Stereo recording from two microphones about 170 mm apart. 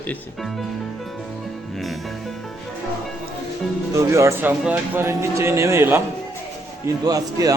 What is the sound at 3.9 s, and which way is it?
Speech, 20° right (ahead or behind).